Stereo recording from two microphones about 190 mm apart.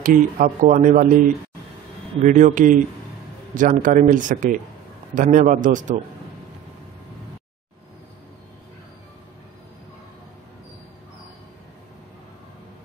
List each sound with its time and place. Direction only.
0.0 s speech: 45° right (ahead or behind)
2.2 s speech: 40° right (ahead or behind)